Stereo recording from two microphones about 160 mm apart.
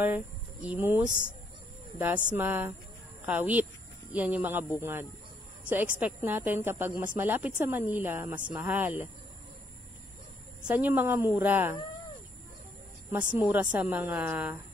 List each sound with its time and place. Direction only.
0.0 s a woman's voice: 10° right (ahead or behind)
5.9 s a woman's voice: 10° right (ahead or behind)
10.6 s a woman's voice: 10° right (ahead or behind)
13.3 s a woman's voice: 10° right (ahead or behind)